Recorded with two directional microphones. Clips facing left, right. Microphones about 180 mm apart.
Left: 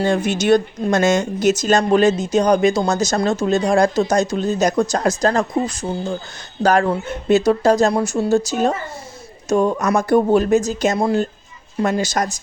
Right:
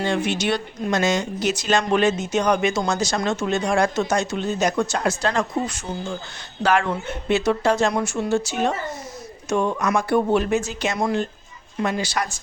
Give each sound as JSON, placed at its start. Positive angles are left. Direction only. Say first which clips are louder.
{"t": 0.0, "sound": "a woman's voice", "louder": "left 4 dB", "side_deg": 45}